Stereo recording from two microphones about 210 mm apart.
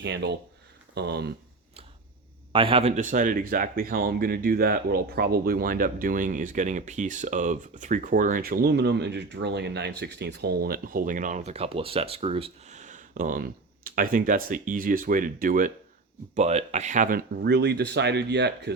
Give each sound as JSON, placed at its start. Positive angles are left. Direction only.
{"t": 0.0, "sound": "speech", "side_deg": -55}
{"t": 2.5, "sound": "speech", "side_deg": -25}